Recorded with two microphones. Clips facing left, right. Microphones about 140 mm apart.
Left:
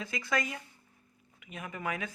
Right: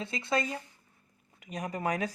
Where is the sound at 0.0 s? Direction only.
25° right (ahead or behind).